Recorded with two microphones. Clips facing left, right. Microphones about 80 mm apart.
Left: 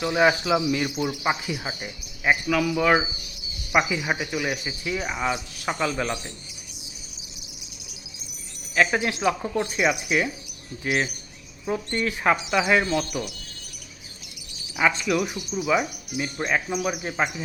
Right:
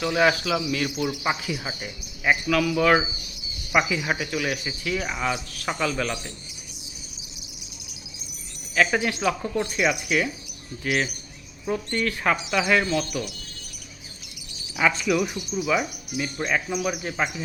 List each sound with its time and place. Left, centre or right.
0.0 s speech: centre
1.2 s speech: centre
8.7 s speech: centre
11.9 s speech: centre
14.8 s speech: centre